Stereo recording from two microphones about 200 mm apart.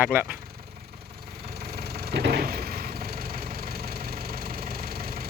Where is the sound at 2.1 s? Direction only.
55° right (ahead or behind).